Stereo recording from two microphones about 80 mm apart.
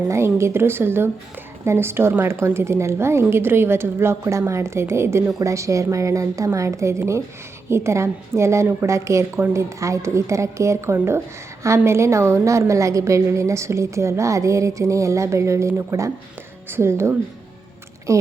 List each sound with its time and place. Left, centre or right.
0.1 s a woman's voice: right